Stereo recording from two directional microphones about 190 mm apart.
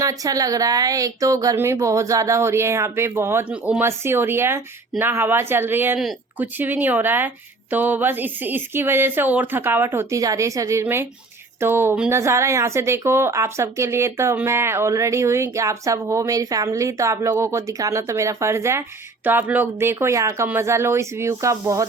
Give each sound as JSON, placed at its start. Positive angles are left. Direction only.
{"t": 0.0, "sound": "speech", "side_deg": -20}